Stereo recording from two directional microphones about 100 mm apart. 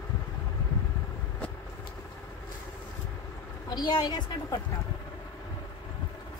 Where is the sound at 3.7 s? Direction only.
45° left (ahead or behind).